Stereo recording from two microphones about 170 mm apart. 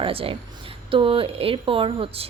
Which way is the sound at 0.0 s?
35° right (ahead or behind).